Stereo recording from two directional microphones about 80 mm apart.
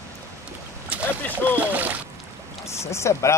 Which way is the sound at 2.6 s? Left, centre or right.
Left.